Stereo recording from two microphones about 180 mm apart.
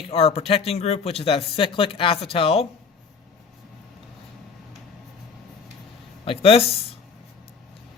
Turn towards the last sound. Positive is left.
turn(degrees=30)  # may be behind; listen again after turning